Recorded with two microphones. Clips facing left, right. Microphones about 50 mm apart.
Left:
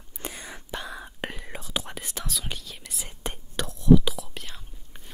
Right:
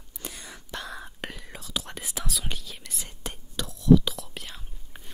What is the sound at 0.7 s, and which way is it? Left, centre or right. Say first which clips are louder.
Whispering: left 1 dB; centre.